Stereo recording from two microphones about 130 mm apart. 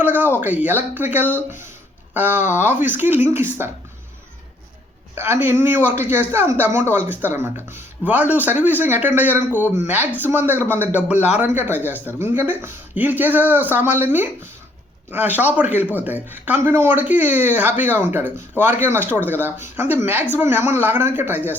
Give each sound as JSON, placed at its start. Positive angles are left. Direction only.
{"t": 0.0, "sound": "a sound", "side_deg": -15}
{"t": 0.3, "sound": "speech", "side_deg": -10}
{"t": 5.1, "sound": "speech", "side_deg": -15}